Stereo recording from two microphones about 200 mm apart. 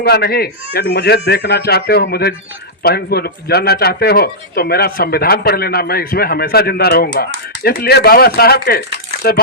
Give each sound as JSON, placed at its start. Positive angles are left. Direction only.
{"t": 0.0, "sound": "speech", "side_deg": 55}